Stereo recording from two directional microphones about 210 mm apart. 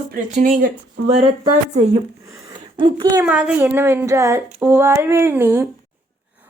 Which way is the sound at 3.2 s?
5° right (ahead or behind).